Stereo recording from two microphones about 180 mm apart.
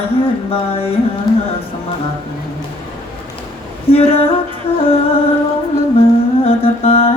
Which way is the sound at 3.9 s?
30° left (ahead or behind).